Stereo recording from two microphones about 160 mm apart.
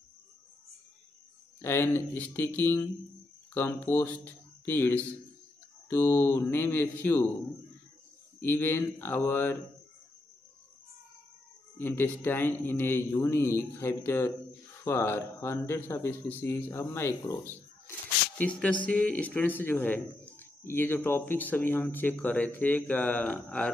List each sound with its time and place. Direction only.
1.6 s speech: 15° left (ahead or behind)
8.4 s speech: 15° left (ahead or behind)
11.8 s speech: 15° left (ahead or behind)